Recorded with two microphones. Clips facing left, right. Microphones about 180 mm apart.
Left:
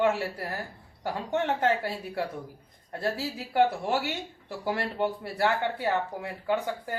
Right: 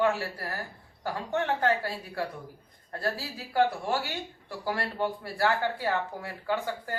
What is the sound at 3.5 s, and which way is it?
Speech, 20° left (ahead or behind).